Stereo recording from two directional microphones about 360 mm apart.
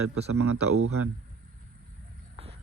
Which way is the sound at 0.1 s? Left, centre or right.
Right.